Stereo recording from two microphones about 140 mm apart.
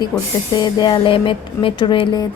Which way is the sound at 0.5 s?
30° left (ahead or behind).